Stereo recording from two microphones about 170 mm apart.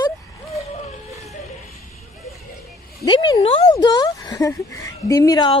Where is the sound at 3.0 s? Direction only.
25° left (ahead or behind).